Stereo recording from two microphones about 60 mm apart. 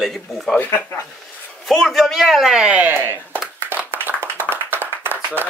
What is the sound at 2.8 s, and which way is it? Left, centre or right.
Speech, right.